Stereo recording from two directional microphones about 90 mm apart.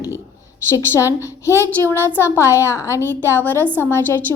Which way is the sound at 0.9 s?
30° left (ahead or behind).